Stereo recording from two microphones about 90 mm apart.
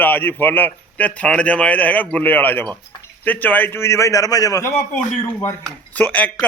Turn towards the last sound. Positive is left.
turn(degrees=15)  # may be behind; listen again after turning